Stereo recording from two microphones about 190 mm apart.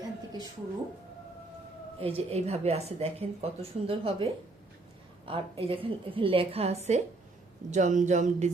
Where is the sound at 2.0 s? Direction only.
30° right (ahead or behind).